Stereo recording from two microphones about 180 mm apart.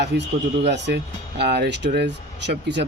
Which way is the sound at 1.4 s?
65° right (ahead or behind).